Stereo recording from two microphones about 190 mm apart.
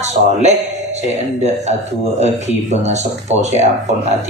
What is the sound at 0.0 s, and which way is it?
A man's voice, 35° right (ahead or behind).